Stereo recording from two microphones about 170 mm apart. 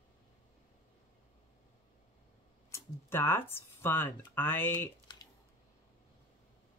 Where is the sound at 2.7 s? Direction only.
15° left (ahead or behind).